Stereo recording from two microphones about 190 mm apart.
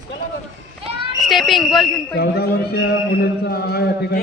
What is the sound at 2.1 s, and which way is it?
A man's voice, 55° left (ahead or behind).